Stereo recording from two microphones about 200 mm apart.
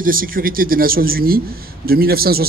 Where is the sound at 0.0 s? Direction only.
45° right (ahead or behind).